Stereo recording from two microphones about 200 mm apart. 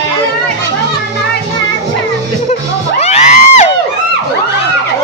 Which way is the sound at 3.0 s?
30° left (ahead or behind).